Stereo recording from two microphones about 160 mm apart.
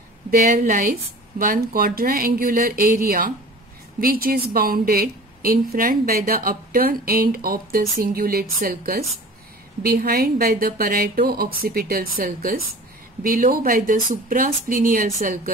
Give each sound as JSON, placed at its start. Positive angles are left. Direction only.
{"t": 0.3, "sound": "a woman's voice", "side_deg": -60}